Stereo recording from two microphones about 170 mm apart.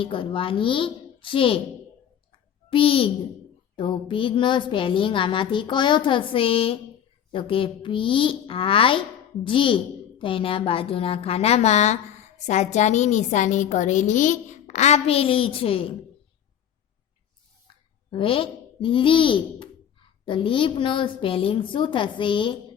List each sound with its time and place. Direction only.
0.0 s a woman's voice: 30° left (ahead or behind)
2.6 s a child's voice: 30° left (ahead or behind)
18.1 s speech: 30° left (ahead or behind)